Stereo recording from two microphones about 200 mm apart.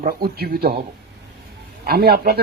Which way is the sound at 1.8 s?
50° right (ahead or behind).